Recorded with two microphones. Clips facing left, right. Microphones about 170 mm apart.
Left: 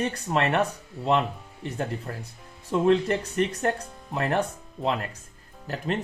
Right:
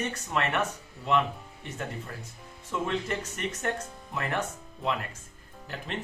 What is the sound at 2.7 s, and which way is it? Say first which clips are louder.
Speech: left 9 dB; 35° left (ahead or behind).